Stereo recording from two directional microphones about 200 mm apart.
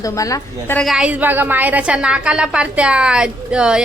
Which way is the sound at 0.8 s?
Centre (ahead or behind).